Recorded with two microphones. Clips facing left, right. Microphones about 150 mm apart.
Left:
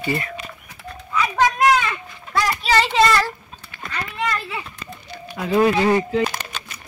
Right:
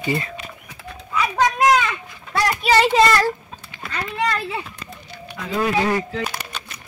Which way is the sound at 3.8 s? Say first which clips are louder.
Even; 5° right (ahead or behind).